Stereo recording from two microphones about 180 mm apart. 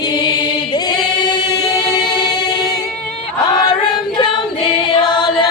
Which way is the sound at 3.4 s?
25° left (ahead or behind).